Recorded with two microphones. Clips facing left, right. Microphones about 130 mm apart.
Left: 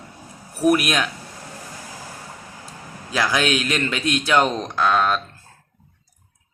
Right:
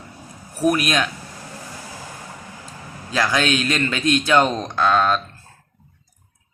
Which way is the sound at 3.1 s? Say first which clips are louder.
Right 1 dB; 5° left (ahead or behind).